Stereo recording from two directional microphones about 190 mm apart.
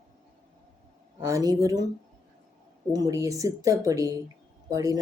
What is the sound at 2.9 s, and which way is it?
Speech, 20° right (ahead or behind).